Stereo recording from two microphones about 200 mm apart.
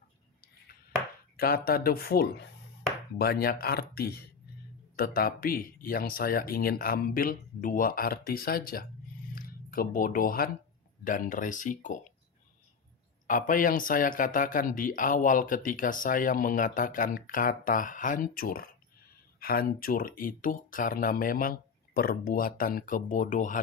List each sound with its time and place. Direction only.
1.4 s a man's voice: 50° left (ahead or behind)
13.2 s a man's voice: 40° left (ahead or behind)